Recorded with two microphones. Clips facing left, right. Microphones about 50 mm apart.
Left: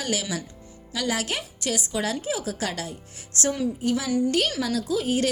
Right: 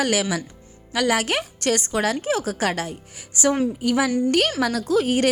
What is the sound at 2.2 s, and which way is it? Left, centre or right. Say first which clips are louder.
Speech: right 6 dB; right.